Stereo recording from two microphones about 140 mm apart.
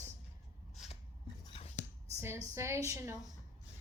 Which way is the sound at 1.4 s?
40° left (ahead or behind).